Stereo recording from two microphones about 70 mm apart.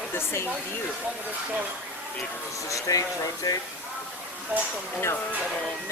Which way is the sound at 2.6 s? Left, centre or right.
Left.